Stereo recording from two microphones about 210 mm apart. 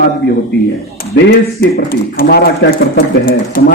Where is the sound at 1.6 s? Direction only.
50° left (ahead or behind).